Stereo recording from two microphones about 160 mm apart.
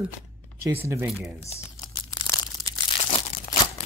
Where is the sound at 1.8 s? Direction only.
30° left (ahead or behind).